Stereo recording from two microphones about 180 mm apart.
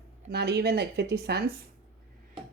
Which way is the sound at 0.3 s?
65° right (ahead or behind).